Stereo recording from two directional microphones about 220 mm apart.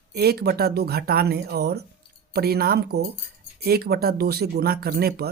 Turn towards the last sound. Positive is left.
turn(degrees=-45)  # may be behind; listen again after turning